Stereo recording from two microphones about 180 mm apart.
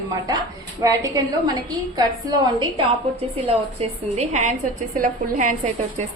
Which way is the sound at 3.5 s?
35° right (ahead or behind).